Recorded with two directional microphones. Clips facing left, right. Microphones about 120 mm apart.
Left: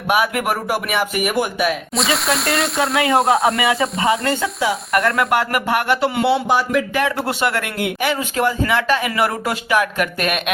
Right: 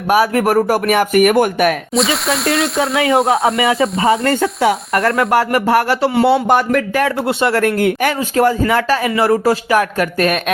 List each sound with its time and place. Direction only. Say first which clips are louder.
0.1 s speech: right 6 dB; 40° right (ahead or behind); by 1.7 s 55° right (ahead or behind)
2.0 s speech: right 1 dB; centre (ahead or behind)
3.6 s speech: right 4 dB; 30° right (ahead or behind)
4.9 s speech: right 1 dB; 30° right (ahead or behind)
6.2 s speech: right 5 dB; 50° right (ahead or behind)
7.3 s speech: right 5 dB; 30° right (ahead or behind)
7.6 s speech: right 7 dB; 45° right (ahead or behind)